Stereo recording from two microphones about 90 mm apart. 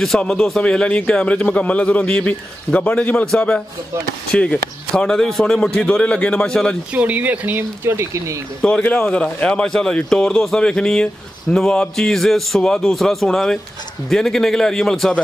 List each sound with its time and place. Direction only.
0.2 s a man's voice: 10° left (ahead or behind)
6.9 s speech: 15° right (ahead or behind); by 8.4 s 30° right (ahead or behind)
8.5 s a man's voice: 10° left (ahead or behind)